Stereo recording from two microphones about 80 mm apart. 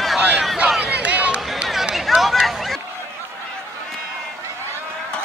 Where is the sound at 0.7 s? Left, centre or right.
Centre.